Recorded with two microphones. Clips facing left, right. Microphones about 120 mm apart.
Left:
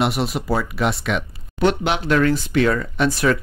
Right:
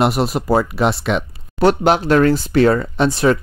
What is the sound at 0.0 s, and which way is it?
Speech, 40° right (ahead or behind).